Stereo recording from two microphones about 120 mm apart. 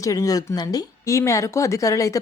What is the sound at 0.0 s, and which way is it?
A woman's voice, 30° left (ahead or behind).